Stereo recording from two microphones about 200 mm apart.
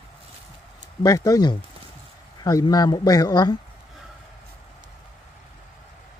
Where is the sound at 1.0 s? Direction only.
15° left (ahead or behind).